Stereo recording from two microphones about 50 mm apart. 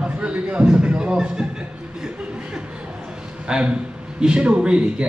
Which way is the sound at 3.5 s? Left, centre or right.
Right.